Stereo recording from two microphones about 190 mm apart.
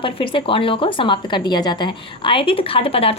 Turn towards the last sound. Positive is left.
turn(degrees=30)  # may be behind; listen again after turning